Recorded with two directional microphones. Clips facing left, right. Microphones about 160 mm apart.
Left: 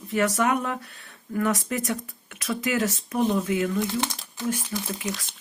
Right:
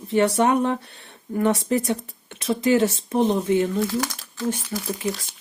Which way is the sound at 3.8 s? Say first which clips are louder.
Right 3 dB; 20° left (ahead or behind).